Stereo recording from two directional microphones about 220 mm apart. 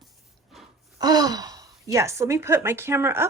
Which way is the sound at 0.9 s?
15° right (ahead or behind).